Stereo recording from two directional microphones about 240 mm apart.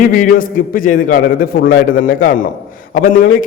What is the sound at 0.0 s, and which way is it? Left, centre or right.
A man's voice, left.